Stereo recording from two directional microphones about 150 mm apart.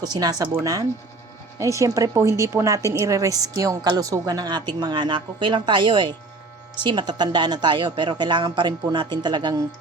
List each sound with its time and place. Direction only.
0.0 s speech: 25° right (ahead or behind)